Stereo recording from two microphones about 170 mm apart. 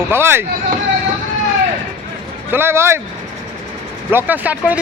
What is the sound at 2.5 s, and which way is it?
Speech, 15° right (ahead or behind).